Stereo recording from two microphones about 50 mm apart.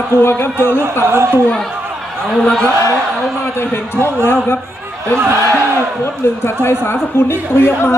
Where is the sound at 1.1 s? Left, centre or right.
Right.